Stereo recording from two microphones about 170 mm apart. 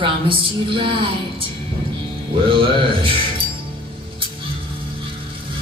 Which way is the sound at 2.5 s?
30° right (ahead or behind).